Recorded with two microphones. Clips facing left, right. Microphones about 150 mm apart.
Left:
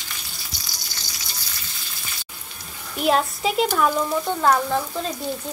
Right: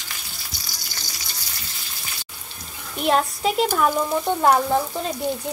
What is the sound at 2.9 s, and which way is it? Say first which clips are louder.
Speech: even; centre (ahead or behind).